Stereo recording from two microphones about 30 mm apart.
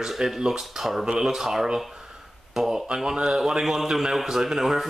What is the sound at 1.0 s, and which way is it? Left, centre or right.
Speech, right.